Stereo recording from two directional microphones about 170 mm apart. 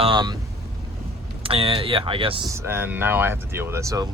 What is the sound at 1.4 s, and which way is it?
Speech, 30° right (ahead or behind).